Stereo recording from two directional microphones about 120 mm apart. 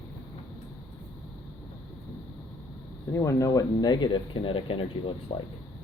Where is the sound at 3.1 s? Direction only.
25° left (ahead or behind); by 5.1 s 50° left (ahead or behind).